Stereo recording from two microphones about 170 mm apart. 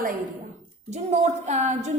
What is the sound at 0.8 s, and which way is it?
A woman's voice, 40° right (ahead or behind).